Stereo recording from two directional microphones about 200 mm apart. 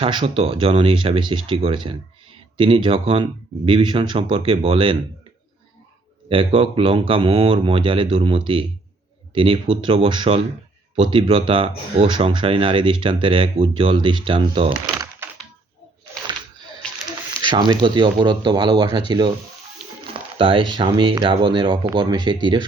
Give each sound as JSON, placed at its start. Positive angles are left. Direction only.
{"t": 0.0, "sound": "speech", "side_deg": -25}
{"t": 6.2, "sound": "speech", "side_deg": -25}
{"t": 17.4, "sound": "speech", "side_deg": -25}
{"t": 19.8, "sound": "a sound", "side_deg": -5}
{"t": 20.1, "sound": "speech", "side_deg": -25}